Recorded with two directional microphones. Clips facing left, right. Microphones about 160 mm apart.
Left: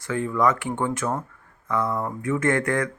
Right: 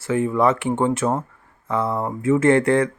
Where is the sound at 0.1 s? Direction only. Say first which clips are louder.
Right 4 dB; 25° right (ahead or behind).